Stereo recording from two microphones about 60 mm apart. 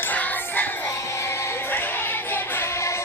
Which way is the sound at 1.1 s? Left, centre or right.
Left.